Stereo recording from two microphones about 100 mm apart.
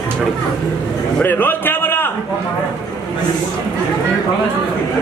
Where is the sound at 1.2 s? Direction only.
20° left (ahead or behind).